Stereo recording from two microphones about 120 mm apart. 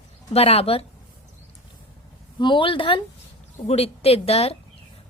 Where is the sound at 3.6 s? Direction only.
60° left (ahead or behind).